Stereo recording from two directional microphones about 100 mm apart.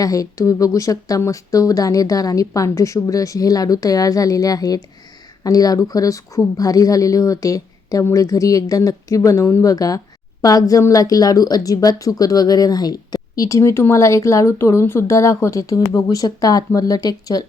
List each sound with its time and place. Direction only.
0.0 s speech: 35° left (ahead or behind)